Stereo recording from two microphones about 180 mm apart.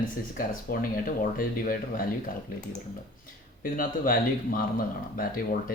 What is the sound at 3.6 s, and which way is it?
Speech, 50° left (ahead or behind).